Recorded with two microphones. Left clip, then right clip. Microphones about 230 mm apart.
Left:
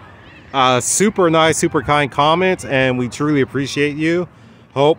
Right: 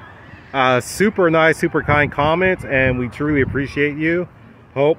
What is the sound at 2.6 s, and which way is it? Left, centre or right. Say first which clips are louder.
Speech: left 1 dB; left.